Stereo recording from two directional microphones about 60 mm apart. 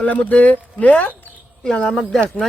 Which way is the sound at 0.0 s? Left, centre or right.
Left.